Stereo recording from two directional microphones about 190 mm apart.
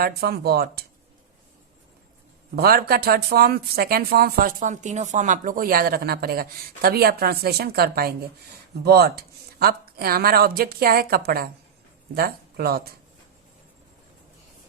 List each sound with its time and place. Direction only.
0.0 s speech: 55° right (ahead or behind)
2.6 s speech: 55° right (ahead or behind)